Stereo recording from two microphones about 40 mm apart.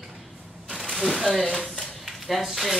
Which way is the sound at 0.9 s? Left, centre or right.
Centre.